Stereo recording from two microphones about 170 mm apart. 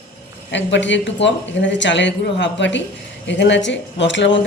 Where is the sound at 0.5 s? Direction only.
90° left.